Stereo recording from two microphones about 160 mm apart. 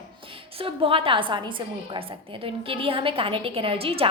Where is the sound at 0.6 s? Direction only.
35° right (ahead or behind).